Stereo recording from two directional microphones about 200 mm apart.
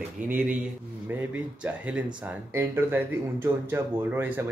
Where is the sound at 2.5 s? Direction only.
10° right (ahead or behind).